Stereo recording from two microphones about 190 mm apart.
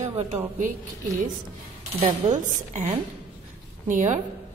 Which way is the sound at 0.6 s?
40° right (ahead or behind).